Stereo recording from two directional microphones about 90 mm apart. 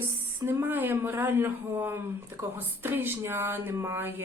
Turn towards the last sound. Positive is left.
turn(degrees=-25)  # may be behind; listen again after turning